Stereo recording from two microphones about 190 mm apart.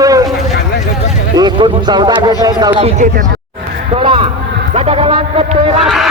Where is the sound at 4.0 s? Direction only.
30° right (ahead or behind).